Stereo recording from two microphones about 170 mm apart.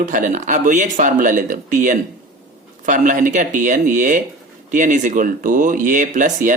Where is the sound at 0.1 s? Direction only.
50° right (ahead or behind).